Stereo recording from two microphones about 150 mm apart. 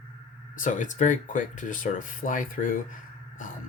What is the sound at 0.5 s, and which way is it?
Speech, 60° left (ahead or behind).